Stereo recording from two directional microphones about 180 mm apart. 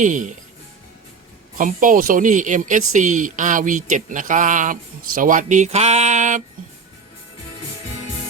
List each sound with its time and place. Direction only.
0.0 s speech: 45° right (ahead or behind)
1.5 s speech: 50° right (ahead or behind)